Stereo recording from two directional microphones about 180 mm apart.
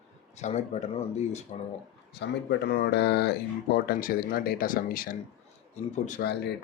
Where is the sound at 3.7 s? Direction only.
55° left (ahead or behind).